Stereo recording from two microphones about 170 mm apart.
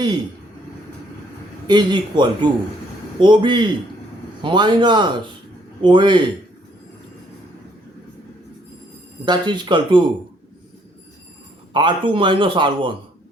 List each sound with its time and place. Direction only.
1.6 s a man's voice: 25° right (ahead or behind)
9.2 s a man's voice: 25° right (ahead or behind)
11.7 s a man's voice: 25° right (ahead or behind)